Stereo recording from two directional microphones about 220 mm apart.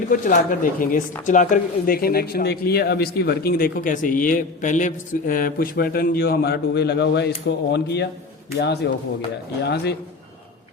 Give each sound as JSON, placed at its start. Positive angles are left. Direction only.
{"t": 0.1, "sound": "speech", "side_deg": 40}